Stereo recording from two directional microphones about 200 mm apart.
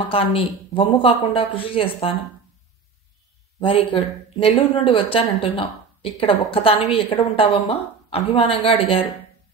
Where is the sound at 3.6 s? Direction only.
25° left (ahead or behind).